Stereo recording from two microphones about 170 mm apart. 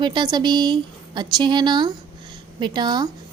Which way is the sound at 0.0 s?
25° right (ahead or behind).